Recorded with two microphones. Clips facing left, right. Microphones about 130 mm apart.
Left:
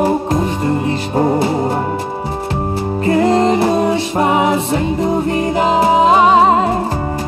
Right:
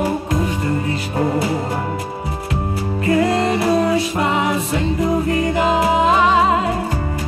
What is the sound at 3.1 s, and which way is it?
Music, 30° left (ahead or behind).